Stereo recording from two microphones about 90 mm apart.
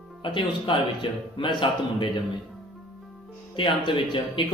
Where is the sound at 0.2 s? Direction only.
70° left (ahead or behind).